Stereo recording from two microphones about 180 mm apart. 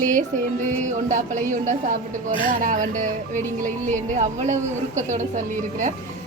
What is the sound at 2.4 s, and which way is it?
Speech, 50° right (ahead or behind).